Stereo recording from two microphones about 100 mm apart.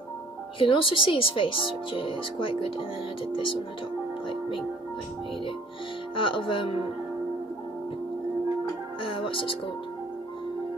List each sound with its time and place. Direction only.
0.6 s speech: 60° left (ahead or behind)
4.3 s music: 60° left (ahead or behind)
6.1 s speech: 60° left (ahead or behind)
9.0 s music: 60° left (ahead or behind)